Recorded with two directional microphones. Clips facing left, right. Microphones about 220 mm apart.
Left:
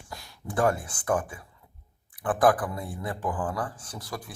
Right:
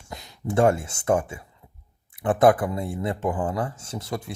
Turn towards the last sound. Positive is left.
turn(degrees=-25)  # may be behind; listen again after turning